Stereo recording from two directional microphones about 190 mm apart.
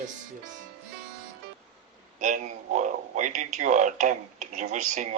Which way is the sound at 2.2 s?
40° right (ahead or behind).